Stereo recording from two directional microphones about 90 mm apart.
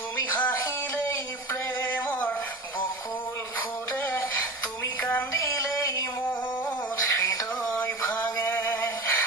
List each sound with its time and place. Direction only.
0.3 s music: 20° left (ahead or behind)
1.0 s a sound: 25° left (ahead or behind)
4.0 s music: 25° left (ahead or behind)
7.8 s male singing: 20° left (ahead or behind)